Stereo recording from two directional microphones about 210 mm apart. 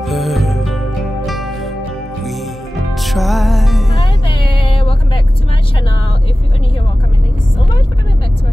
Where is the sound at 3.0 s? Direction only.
Centre (ahead or behind).